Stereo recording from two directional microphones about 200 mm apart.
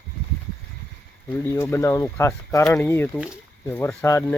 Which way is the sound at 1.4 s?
15° left (ahead or behind).